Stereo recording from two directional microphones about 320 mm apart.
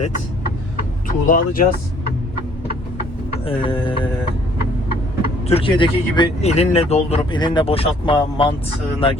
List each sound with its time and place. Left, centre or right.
1.0 s speech: left
3.4 s mantra: centre
5.5 s speech: centre